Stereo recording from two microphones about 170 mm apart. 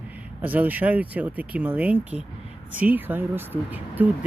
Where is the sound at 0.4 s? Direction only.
10° right (ahead or behind).